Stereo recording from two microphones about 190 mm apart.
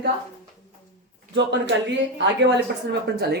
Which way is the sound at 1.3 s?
65° right (ahead or behind).